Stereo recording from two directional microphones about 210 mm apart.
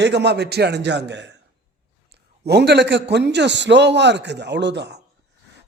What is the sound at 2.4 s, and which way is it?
A man's voice, 55° right (ahead or behind).